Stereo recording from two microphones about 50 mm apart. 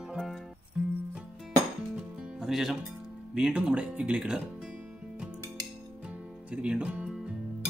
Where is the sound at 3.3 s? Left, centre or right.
Centre.